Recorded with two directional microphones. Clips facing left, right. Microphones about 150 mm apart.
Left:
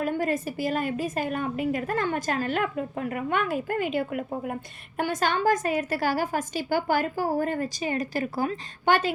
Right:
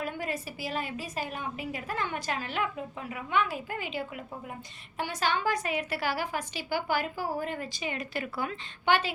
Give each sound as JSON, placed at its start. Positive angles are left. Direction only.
{"t": 0.0, "sound": "a woman's voice", "side_deg": 45}